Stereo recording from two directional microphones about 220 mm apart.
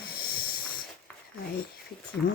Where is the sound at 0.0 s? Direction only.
45° left (ahead or behind).